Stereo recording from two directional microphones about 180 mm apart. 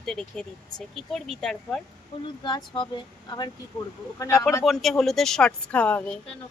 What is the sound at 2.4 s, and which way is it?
Speech, 25° left (ahead or behind).